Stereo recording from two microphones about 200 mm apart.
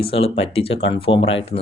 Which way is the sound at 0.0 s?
30° left (ahead or behind).